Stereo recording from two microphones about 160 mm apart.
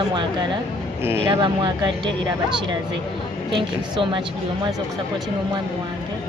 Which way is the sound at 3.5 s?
30° right (ahead or behind).